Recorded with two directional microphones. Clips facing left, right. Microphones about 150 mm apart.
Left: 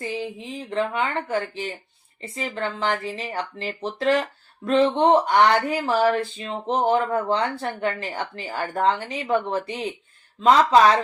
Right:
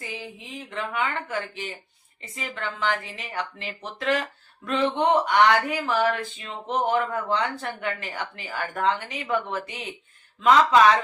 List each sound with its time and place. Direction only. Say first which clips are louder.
0.0 s speech: left 8 dB; 30° left (ahead or behind)